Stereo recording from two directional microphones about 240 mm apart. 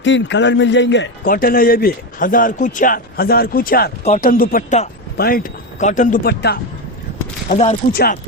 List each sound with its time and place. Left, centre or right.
0.0 s a man's voice: left
7.5 s a man's voice: left